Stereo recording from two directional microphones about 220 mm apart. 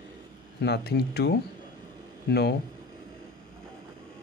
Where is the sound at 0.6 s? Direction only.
50° left (ahead or behind).